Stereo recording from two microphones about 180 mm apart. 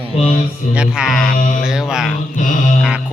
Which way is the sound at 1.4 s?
45° left (ahead or behind).